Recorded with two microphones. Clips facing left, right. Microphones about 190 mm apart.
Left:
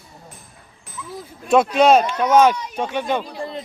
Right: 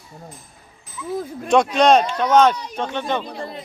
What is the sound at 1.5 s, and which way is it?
A man's voice, 5° left (ahead or behind).